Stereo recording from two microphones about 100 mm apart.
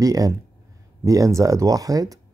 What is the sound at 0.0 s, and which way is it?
Speech, 35° right (ahead or behind).